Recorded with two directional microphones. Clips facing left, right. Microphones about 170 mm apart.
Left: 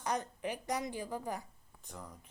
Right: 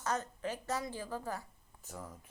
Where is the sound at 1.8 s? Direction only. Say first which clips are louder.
Right 2 dB; 5° right (ahead or behind).